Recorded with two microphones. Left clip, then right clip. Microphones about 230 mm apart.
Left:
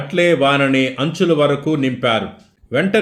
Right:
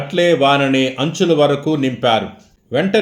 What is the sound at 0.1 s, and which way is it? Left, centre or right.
Speech, centre.